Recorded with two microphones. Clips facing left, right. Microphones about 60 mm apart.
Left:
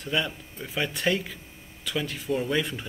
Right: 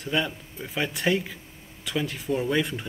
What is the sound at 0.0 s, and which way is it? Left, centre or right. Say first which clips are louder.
Speech: right 1 dB; centre.